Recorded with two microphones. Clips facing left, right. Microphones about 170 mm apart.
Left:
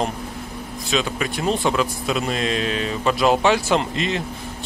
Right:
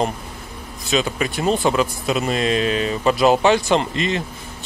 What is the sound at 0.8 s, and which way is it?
Speech, centre (ahead or behind).